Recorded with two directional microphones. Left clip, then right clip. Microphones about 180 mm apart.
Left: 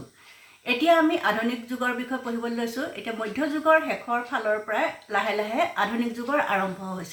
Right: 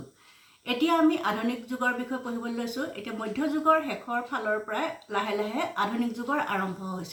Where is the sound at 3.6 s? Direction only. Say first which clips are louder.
Left 4 dB; 15° left (ahead or behind).